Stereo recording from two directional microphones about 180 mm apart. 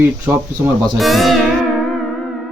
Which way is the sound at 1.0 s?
Centre (ahead or behind).